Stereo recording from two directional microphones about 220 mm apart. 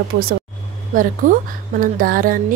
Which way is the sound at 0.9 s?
40° right (ahead or behind).